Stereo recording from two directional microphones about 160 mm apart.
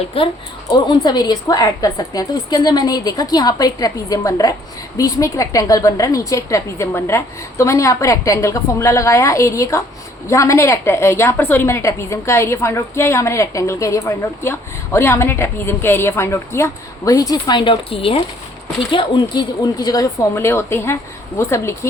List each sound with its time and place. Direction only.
0.1 s a woman's voice: 35° left (ahead or behind); by 21.8 s 15° left (ahead or behind)